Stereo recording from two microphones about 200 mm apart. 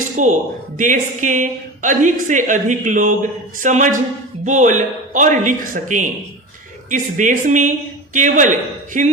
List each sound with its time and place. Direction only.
0.2 s a woman's voice: 40° right (ahead or behind)